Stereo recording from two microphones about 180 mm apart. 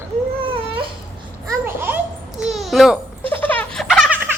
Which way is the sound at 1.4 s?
10° right (ahead or behind).